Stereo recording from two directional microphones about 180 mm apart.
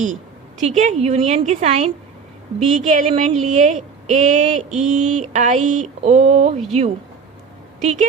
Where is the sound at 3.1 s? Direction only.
35° right (ahead or behind).